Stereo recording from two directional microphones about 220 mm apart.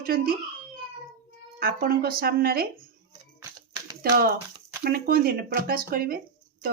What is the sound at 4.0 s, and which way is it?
Speech, 45° right (ahead or behind).